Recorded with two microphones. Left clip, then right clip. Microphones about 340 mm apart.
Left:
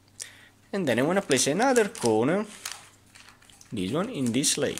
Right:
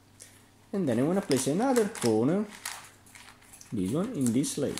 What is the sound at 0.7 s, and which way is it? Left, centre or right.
Speech, left.